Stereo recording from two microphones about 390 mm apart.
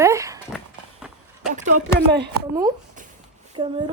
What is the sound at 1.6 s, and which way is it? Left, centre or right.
Speech, right.